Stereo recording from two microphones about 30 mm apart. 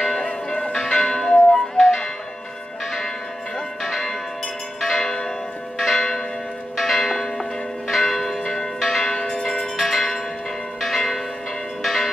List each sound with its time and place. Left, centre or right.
0.1 s change ringing: left
3.5 s change ringing: centre
5.0 s church bell: centre
9.1 s church bell: left
9.8 s bell: centre
10.9 s change ringing: centre
11.8 s church bell: centre